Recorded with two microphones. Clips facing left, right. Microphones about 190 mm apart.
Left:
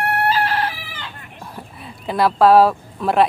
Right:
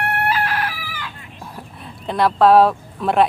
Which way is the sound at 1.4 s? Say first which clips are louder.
Even; centre (ahead or behind).